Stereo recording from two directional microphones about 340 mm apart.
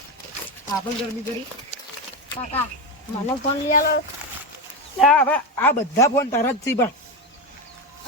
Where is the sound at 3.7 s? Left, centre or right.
Left.